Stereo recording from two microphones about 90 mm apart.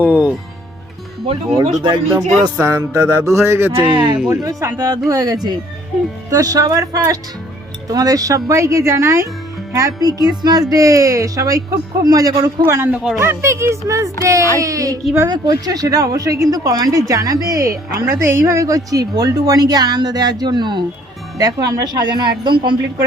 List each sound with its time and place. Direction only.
0.0 s speech: 20° right (ahead or behind)
1.5 s speech: 55° right (ahead or behind)
2.1 s speech: 35° right (ahead or behind)
3.9 s speech: 55° right (ahead or behind)
5.0 s speech: 40° right (ahead or behind)
12.9 s speech: 10° right (ahead or behind)
13.1 s speech: 30° right (ahead or behind); by 20.8 s 55° right (ahead or behind)
21.3 s speech: 40° right (ahead or behind)